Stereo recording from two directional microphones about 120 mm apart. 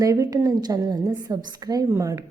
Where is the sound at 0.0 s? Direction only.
30° right (ahead or behind).